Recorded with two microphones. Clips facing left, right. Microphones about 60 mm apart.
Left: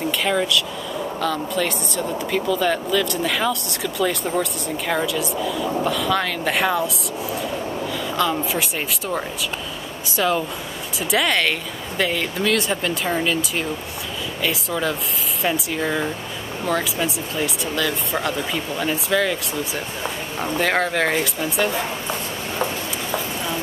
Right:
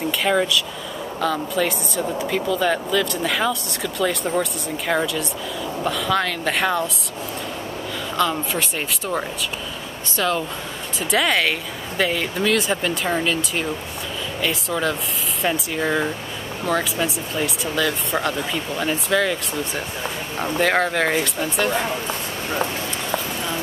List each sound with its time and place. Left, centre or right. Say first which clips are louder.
0.2 s speech: right 2 dB; centre
8.2 s speech: even; centre
23.1 s a sound: left 1 dB; centre